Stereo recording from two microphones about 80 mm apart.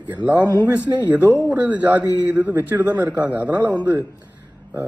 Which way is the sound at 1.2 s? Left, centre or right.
Left.